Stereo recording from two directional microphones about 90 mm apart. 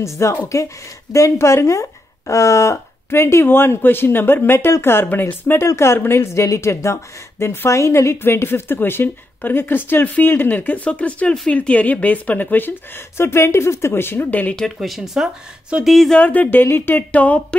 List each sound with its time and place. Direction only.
0.0 s a woman's voice: 35° left (ahead or behind)
14.6 s speech: centre (ahead or behind)
16.2 s a woman's voice: 15° left (ahead or behind)